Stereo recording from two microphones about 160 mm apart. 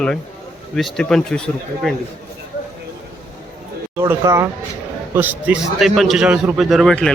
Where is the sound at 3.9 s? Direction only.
15° right (ahead or behind).